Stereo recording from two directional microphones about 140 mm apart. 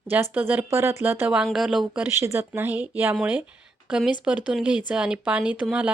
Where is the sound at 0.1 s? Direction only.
15° right (ahead or behind).